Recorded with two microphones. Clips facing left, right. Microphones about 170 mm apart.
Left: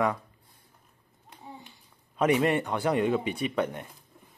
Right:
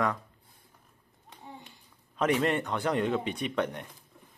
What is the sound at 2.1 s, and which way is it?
A man's voice, 10° left (ahead or behind).